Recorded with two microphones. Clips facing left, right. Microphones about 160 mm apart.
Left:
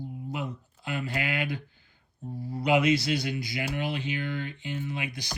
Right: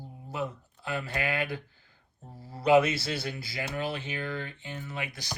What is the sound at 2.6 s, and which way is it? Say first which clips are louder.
Speech: right 1 dB; 15° left (ahead or behind).